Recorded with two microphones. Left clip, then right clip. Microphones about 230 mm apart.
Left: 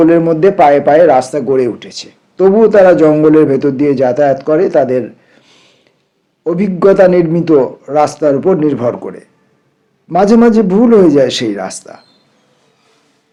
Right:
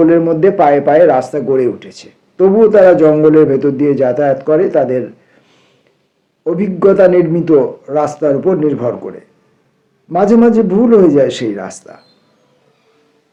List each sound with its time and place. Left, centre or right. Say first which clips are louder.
0.0 s a man's voice: left 1 dB; left